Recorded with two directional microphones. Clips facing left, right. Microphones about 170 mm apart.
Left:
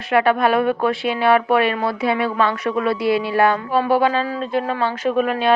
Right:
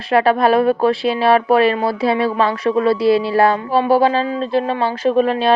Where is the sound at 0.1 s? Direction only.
35° right (ahead or behind).